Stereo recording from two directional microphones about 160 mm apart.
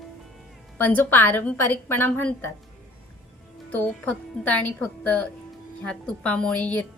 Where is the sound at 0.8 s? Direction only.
10° left (ahead or behind).